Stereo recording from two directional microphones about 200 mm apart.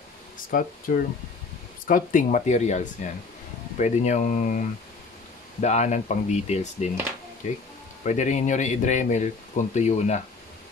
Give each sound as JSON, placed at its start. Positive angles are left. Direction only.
{"t": 0.5, "sound": "speech", "side_deg": 45}
{"t": 8.0, "sound": "speech", "side_deg": 35}